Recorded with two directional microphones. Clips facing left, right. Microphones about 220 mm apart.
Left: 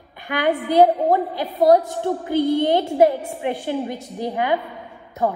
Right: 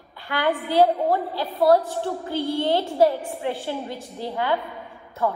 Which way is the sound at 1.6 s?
45° left (ahead or behind).